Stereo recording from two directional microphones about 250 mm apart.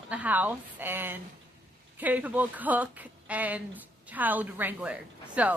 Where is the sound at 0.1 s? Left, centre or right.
Centre.